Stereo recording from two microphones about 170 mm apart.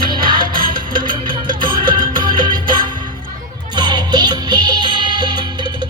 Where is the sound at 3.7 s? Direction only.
25° right (ahead or behind).